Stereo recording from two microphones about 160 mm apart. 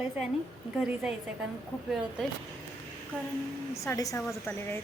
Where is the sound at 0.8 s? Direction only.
5° right (ahead or behind).